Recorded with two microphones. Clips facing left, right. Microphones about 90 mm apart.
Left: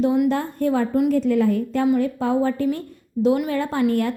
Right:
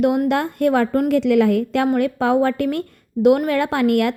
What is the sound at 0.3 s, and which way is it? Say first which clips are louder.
A woman's voice: right 3 dB; 70° right (ahead or behind).